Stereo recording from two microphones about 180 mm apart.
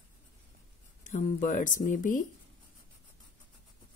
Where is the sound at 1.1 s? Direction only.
45° left (ahead or behind).